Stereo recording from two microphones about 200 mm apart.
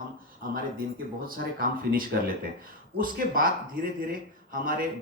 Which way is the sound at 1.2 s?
45° right (ahead or behind).